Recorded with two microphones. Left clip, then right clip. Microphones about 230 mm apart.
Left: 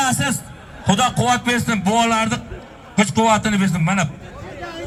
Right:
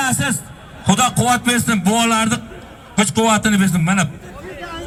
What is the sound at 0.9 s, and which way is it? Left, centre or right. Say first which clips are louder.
A man's voice: right 1 dB; right.